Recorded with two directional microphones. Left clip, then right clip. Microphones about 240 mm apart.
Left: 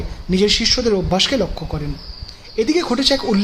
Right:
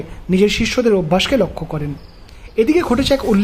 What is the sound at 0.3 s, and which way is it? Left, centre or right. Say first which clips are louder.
Speech: even; centre.